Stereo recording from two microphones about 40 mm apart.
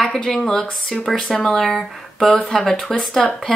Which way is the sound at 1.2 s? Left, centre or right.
Left.